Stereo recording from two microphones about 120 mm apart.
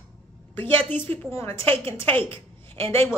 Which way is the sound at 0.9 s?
15° left (ahead or behind).